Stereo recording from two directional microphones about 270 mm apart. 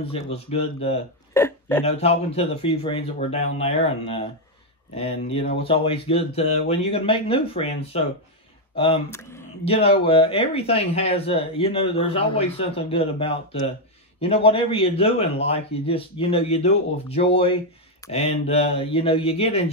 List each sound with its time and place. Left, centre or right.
0.0 s speech: left
1.3 s a sound: centre
1.9 s speech: left
9.7 s speech: left